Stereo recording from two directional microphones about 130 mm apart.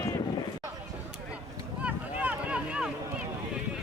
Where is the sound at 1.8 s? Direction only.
10° right (ahead or behind).